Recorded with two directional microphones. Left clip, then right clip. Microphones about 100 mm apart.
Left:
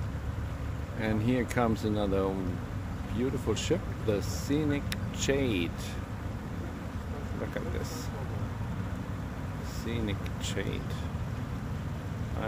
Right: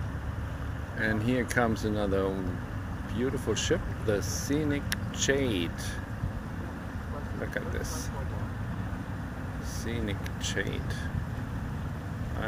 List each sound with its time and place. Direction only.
0.9 s speech: 35° left (ahead or behind)
9.8 s speech: 35° left (ahead or behind)